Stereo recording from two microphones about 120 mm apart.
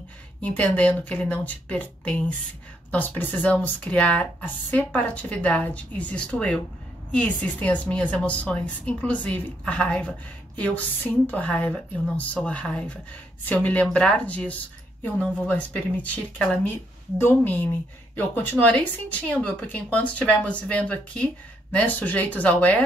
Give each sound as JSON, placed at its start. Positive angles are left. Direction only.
{"t": 0.4, "sound": "a woman's voice", "side_deg": 15}